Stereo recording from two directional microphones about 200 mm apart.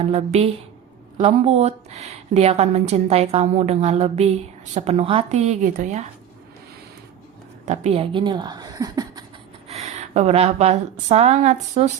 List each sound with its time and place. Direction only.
0.0 s a woman's voice: 30° right (ahead or behind)
7.6 s speech: 35° right (ahead or behind); by 9.2 s 20° right (ahead or behind)
9.6 s a woman's voice: 35° right (ahead or behind)